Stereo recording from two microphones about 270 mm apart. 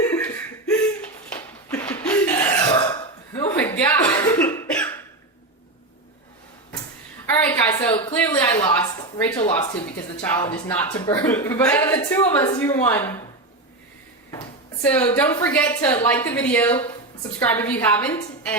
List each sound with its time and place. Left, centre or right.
0.1 s laughter: centre
1.3 s burping: centre
3.3 s cough: centre
7.4 s a sound: centre
9.1 s speech: centre
14.3 s speech: centre